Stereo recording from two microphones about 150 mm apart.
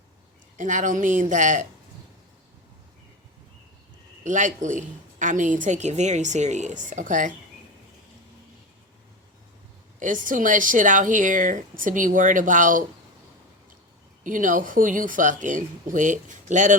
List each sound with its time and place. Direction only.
0.5 s speech: 60° right (ahead or behind)
4.2 s speech: 55° right (ahead or behind)
10.0 s speech: 60° right (ahead or behind)
14.3 s speech: 60° right (ahead or behind)